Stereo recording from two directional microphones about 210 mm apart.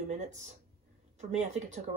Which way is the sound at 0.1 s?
35° right (ahead or behind).